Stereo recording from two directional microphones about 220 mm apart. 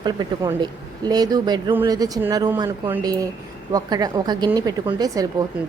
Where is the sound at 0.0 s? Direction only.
20° right (ahead or behind).